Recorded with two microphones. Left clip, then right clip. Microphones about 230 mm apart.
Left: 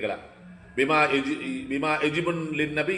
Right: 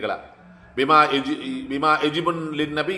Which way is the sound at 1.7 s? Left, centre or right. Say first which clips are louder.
Right 5 dB; right.